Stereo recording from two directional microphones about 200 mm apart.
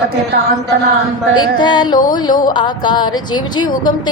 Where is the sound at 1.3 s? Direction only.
20° left (ahead or behind).